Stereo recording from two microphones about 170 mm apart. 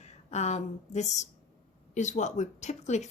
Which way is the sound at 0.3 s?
40° left (ahead or behind).